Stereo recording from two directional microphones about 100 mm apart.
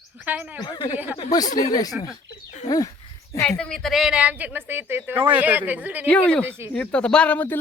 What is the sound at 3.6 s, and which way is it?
A woman's voice, 5° left (ahead or behind).